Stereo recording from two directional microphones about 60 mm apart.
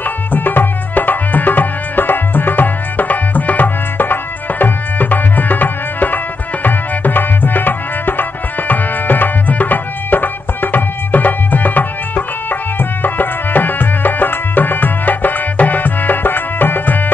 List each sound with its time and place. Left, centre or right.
0.0 s music: left